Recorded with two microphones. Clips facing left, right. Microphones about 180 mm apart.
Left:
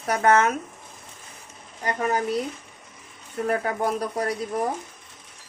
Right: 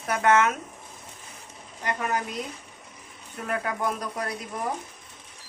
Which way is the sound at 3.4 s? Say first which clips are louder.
Left 4 dB; 35° left (ahead or behind).